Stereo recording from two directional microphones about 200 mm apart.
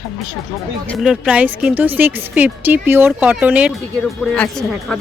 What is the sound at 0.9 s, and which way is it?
Speech, centre (ahead or behind).